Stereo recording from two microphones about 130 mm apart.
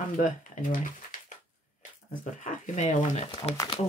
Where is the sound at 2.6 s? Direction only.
70° left (ahead or behind).